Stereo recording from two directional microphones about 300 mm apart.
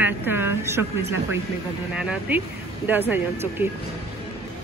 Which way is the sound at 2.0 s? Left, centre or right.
Centre.